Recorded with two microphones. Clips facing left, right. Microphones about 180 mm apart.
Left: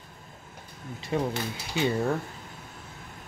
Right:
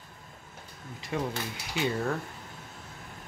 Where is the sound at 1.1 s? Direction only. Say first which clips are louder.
Left 4 dB; 30° left (ahead or behind).